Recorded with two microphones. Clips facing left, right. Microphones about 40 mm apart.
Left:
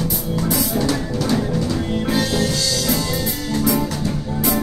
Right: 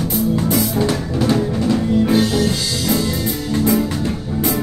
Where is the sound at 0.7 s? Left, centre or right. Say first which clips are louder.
Right 2 dB; right.